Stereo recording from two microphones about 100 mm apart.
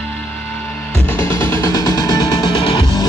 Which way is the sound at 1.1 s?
30° left (ahead or behind).